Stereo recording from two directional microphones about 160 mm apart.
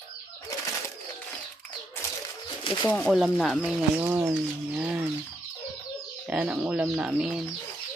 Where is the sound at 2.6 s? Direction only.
30° left (ahead or behind).